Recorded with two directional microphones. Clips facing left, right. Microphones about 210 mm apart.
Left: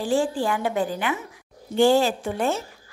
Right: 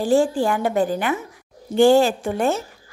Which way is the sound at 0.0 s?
45° right (ahead or behind).